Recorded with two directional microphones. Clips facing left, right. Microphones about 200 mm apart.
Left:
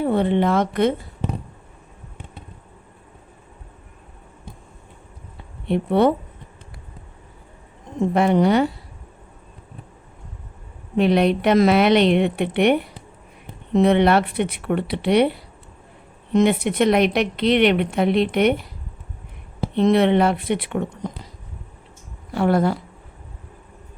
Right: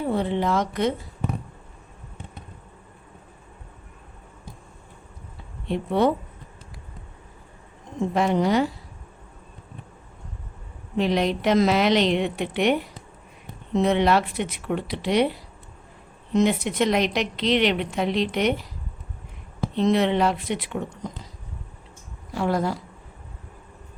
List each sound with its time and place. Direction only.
0.0 s speech: 60° left (ahead or behind)
5.6 s a woman's voice: 60° left (ahead or behind)
8.1 s a woman's voice: 60° left (ahead or behind)
10.9 s a woman's voice: 60° left (ahead or behind)
19.7 s a woman's voice: 60° left (ahead or behind)
22.3 s a woman's voice: 60° left (ahead or behind)